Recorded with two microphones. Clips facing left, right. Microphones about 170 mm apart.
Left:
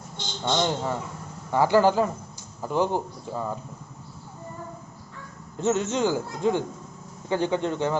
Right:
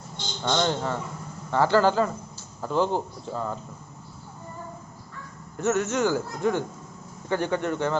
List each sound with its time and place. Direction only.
0.4 s a man's voice: 10° left (ahead or behind)
5.5 s a man's voice: 20° left (ahead or behind)